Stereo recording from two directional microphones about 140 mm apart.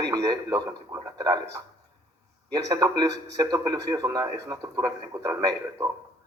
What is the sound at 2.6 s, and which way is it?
A man's voice, 25° right (ahead or behind).